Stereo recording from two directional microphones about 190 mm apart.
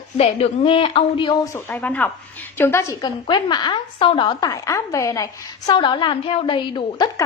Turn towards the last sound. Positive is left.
turn(degrees=20)  # may be behind; listen again after turning